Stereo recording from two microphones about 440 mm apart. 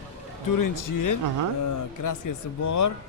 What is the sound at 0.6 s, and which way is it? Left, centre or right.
Speech, left.